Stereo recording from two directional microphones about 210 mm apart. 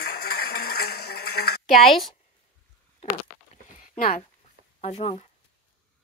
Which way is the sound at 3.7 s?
40° left (ahead or behind).